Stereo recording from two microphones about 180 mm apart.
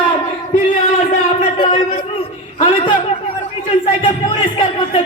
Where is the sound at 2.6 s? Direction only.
30° left (ahead or behind).